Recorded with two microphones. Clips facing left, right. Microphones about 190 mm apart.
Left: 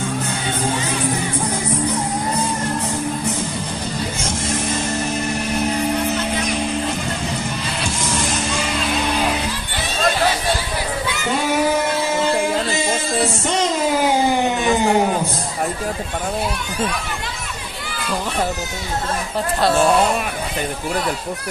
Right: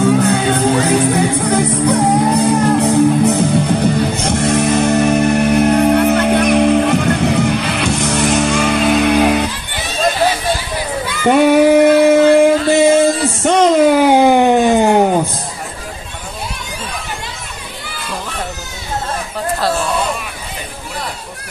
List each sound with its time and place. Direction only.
0.1 s music: 75° right (ahead or behind); by 9.4 s 60° right (ahead or behind)
11.2 s singing: 65° right (ahead or behind)
13.5 s a sound: 60° right (ahead or behind)